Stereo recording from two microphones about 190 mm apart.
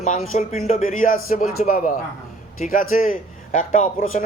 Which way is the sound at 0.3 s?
40° left (ahead or behind).